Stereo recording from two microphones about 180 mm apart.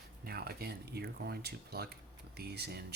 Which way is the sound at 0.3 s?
60° right (ahead or behind).